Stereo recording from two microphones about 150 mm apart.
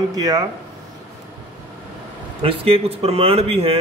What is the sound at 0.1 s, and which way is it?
Speech, 25° right (ahead or behind).